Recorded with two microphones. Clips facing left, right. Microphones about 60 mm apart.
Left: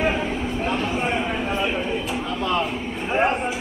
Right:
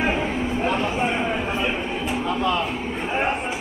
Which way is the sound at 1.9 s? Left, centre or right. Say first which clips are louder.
Right 1 dB; right.